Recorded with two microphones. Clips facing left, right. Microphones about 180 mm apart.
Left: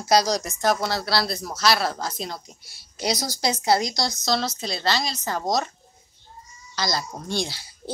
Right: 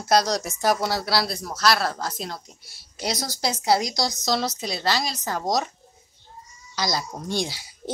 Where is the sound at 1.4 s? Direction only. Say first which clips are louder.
Even; 5° left (ahead or behind).